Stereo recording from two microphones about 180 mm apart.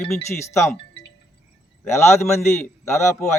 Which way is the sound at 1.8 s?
15° left (ahead or behind).